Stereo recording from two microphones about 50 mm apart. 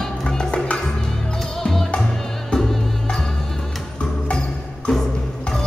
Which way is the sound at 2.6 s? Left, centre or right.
Centre.